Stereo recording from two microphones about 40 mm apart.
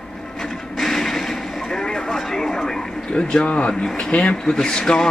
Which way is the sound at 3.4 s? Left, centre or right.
Left.